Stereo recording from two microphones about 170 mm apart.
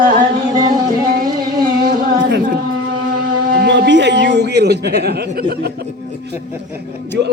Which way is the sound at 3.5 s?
70° right (ahead or behind).